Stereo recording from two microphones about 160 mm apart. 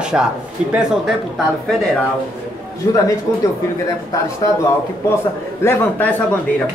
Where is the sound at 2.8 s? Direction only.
20° left (ahead or behind).